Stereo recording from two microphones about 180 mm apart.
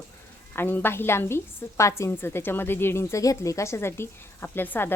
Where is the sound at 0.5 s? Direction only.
10° left (ahead or behind).